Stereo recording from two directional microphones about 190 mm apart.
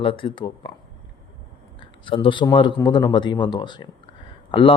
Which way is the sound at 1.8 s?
25° left (ahead or behind).